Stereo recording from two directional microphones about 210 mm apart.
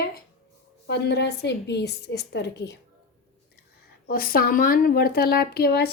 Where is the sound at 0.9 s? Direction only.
50° left (ahead or behind).